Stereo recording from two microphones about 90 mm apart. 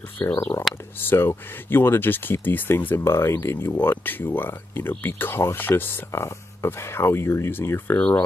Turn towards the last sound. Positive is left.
turn(degrees=25)  # may be behind; listen again after turning